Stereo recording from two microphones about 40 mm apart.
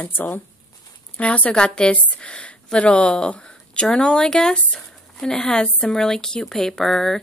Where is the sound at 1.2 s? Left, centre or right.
Left.